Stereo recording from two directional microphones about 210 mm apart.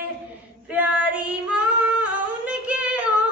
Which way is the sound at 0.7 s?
5° right (ahead or behind).